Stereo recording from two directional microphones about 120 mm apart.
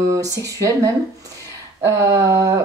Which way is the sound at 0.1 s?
25° right (ahead or behind).